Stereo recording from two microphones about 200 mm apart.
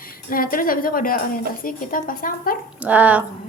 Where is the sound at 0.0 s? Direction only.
45° left (ahead or behind).